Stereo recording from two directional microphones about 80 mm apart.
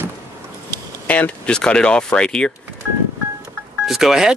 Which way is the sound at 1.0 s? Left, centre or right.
Centre.